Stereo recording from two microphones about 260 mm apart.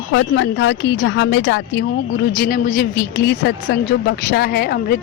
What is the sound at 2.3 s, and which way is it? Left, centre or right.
A woman's voice, left.